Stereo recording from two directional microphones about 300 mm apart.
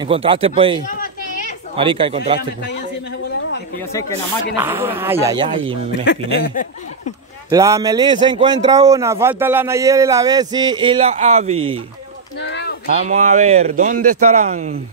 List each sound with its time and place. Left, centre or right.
0.0 s a man's voice: centre
0.8 s a sound: left
1.8 s a man's voice: centre
4.6 s a man's voice: centre
6.0 s speech: left
7.4 s a man's voice: centre
12.4 s a sound: left
13.0 s speech: right